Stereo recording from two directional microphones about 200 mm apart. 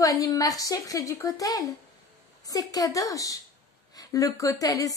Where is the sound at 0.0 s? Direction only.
15° left (ahead or behind).